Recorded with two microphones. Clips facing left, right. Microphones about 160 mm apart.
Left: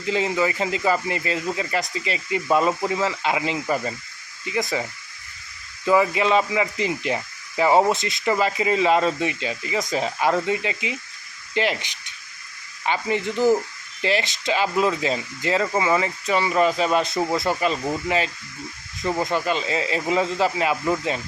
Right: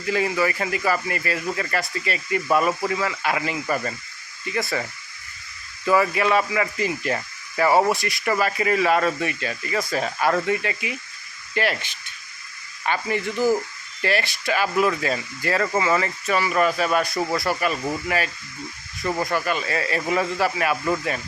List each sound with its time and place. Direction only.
0.0 s speech: 20° left (ahead or behind)
19.0 s speech: 20° left (ahead or behind)